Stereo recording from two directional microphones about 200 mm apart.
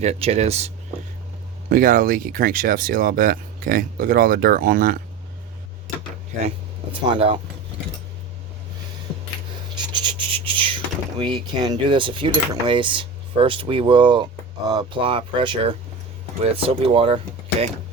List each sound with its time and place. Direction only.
0.0 s speech: 30° right (ahead or behind)
1.7 s speech: 45° right (ahead or behind)
6.9 s speech: 25° right (ahead or behind)
9.7 s speech: 20° right (ahead or behind)